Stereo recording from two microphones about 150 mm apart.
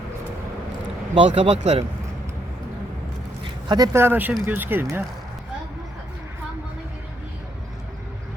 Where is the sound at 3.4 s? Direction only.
30° right (ahead or behind).